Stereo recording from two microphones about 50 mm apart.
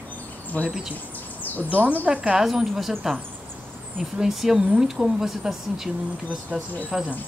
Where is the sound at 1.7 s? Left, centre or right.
Right.